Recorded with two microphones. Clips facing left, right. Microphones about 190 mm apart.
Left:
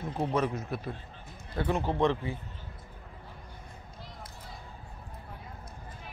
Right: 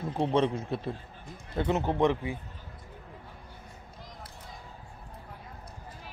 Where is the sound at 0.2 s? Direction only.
30° right (ahead or behind).